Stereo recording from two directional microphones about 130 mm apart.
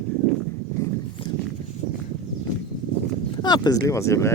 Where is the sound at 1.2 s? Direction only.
40° left (ahead or behind).